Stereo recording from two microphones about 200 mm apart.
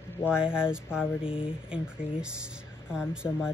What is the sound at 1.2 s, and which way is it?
Speech, 25° left (ahead or behind).